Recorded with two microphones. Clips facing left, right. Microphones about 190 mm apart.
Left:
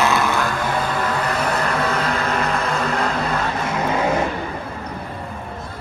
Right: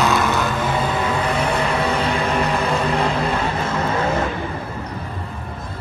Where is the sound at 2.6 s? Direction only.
35° right (ahead or behind).